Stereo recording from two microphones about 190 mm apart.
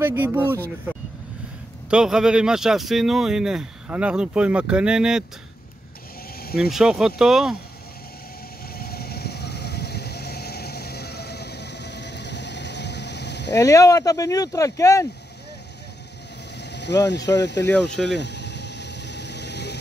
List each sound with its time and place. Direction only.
0.0 s speech: 10° right (ahead or behind)
1.9 s speech: 5° right (ahead or behind)
6.4 s vehicle: 55° left (ahead or behind)
6.7 s speech: 5° right (ahead or behind)
8.7 s vehicle: 55° left (ahead or behind)
13.6 s speech: 15° left (ahead or behind)
16.5 s vehicle: 65° left (ahead or behind)
17.1 s speech: 65° left (ahead or behind)
17.6 s speech: 5° left (ahead or behind)
18.0 s vehicle: 65° left (ahead or behind)